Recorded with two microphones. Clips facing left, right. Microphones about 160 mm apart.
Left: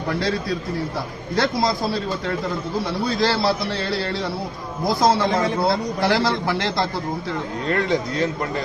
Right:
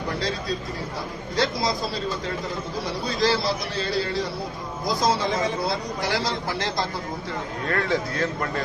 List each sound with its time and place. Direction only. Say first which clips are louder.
1.4 s a man's voice: left 4 dB; 60° left (ahead or behind)
2.8 s a man's voice: left 1 dB; 60° left (ahead or behind)
7.7 s a man's voice: left 3 dB; 20° left (ahead or behind)